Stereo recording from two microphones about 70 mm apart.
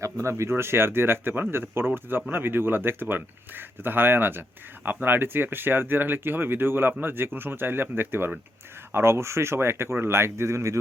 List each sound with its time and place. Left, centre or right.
0.0 s speech: right